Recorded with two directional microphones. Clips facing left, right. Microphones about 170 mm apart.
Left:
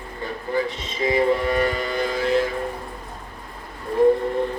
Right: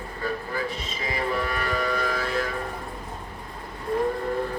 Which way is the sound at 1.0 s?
25° left (ahead or behind).